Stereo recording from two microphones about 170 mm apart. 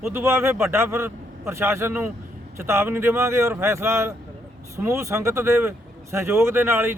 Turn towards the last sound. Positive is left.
turn(degrees=-15)  # may be behind; listen again after turning